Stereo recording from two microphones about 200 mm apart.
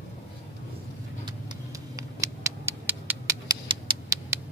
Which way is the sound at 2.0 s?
15° right (ahead or behind).